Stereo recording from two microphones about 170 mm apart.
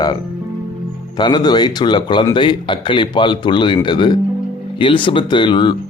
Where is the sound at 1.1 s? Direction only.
25° left (ahead or behind).